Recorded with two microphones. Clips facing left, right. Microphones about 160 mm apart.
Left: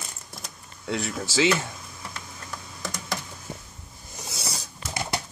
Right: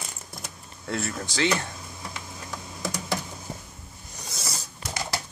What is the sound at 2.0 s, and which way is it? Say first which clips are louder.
Typing: right 1 dB; 15° right (ahead or behind).